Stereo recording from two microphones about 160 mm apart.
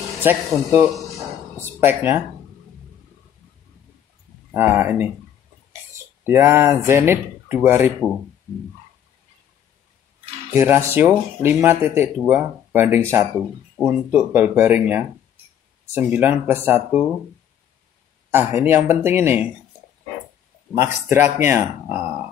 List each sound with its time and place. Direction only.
0.2 s speech: 15° right (ahead or behind)
4.6 s speech: 15° right (ahead or behind)
10.5 s speech: 15° right (ahead or behind)
18.3 s speech: 15° right (ahead or behind)
20.7 s speech: 15° right (ahead or behind)